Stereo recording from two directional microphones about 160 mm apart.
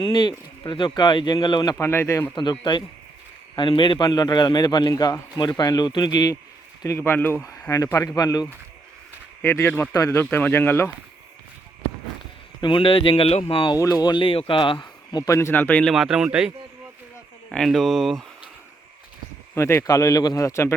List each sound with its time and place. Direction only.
0.0 s a man's voice: 30° left (ahead or behind)
1.8 s speech: 15° left (ahead or behind)
2.3 s a man's voice: 30° left (ahead or behind); by 10.9 s 10° left (ahead or behind)
12.6 s speech: 30° left (ahead or behind)
13.7 s a man's voice: 20° left (ahead or behind); by 16.5 s 5° right (ahead or behind)
17.5 s speech: centre (ahead or behind)
19.5 s a man's voice: 15° left (ahead or behind)